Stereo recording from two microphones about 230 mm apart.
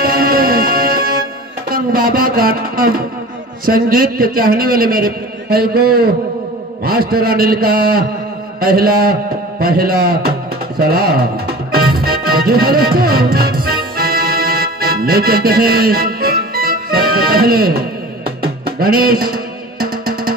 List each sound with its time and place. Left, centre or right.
0.0 s music: right
1.7 s a man's voice: right
11.7 s music: right